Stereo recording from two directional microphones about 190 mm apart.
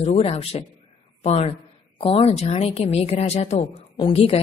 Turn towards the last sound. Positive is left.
turn(degrees=30)  # may be behind; listen again after turning